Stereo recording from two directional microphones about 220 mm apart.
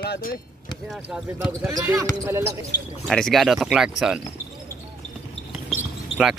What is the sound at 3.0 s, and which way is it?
Speech, centre (ahead or behind).